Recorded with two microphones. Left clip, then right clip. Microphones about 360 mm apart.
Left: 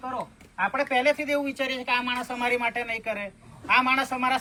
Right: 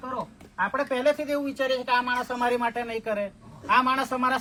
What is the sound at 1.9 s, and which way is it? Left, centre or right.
Speech, centre.